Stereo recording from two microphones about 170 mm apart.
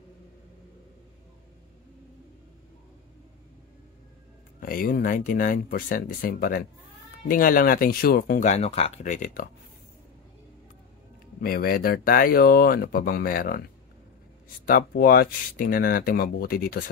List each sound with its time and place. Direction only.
4.6 s speech: 55° left (ahead or behind)
11.4 s speech: 60° left (ahead or behind)
14.7 s speech: 60° left (ahead or behind)